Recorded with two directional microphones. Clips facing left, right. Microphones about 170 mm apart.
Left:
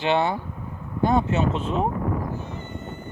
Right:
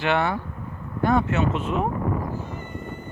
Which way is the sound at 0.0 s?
25° left (ahead or behind).